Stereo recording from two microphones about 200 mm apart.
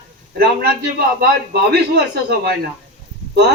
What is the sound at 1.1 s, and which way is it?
A man's voice, 55° right (ahead or behind).